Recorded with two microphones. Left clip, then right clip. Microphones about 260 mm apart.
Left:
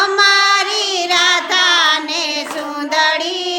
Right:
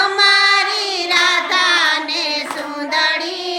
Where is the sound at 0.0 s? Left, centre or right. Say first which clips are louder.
Left 1 dB; centre.